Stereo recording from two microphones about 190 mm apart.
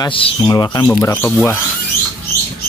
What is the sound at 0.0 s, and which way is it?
Speech, 25° left (ahead or behind).